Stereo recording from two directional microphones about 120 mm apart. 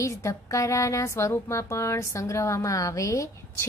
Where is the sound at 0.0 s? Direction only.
25° left (ahead or behind).